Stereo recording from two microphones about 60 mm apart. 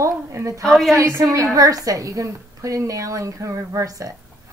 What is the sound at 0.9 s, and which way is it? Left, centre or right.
Speech, right.